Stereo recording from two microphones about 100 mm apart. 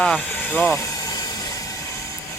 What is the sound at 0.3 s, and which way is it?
Speech, 20° left (ahead or behind).